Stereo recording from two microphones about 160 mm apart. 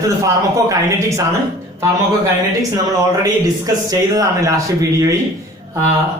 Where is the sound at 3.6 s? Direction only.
20° right (ahead or behind).